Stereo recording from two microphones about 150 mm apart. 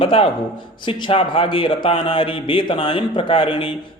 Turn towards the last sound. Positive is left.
turn(degrees=35)  # may be behind; listen again after turning